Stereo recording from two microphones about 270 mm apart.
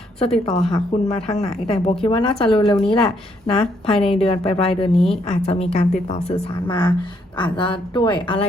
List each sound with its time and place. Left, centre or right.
0.3 s speech: centre
0.7 s a woman's voice: left